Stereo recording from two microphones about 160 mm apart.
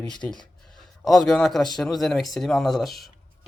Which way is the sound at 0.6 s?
Centre (ahead or behind).